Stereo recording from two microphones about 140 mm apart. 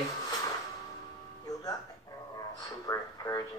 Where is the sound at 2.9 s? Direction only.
25° left (ahead or behind).